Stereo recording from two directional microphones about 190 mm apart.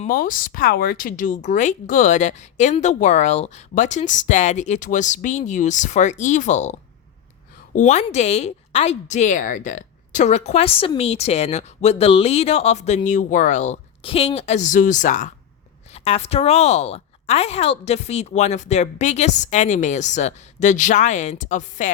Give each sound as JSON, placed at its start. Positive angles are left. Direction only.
{"t": 0.0, "sound": "speech", "side_deg": 45}
{"t": 7.8, "sound": "speech", "side_deg": 40}